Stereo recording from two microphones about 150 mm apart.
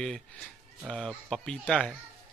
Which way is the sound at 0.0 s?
5° left (ahead or behind).